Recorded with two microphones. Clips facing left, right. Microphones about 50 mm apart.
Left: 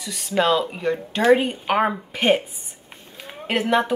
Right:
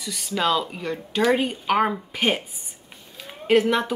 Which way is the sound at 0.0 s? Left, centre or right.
Centre.